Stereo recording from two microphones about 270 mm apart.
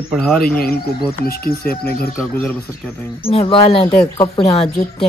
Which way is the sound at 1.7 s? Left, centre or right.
Left.